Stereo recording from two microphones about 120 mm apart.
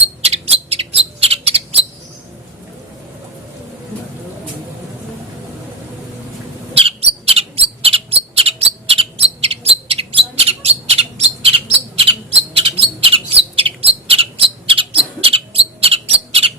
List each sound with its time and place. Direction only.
0.2 s bird: 60° right (ahead or behind)
6.7 s bird: 55° right (ahead or behind)